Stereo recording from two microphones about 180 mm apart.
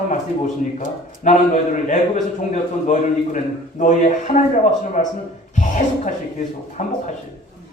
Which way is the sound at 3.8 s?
40° left (ahead or behind).